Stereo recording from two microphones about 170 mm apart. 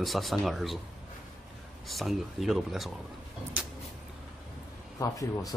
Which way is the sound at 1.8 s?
Centre (ahead or behind).